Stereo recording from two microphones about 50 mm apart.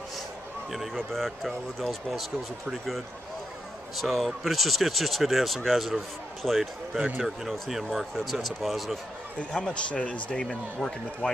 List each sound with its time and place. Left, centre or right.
0.7 s speech: centre
3.9 s speech: centre
9.4 s speech: left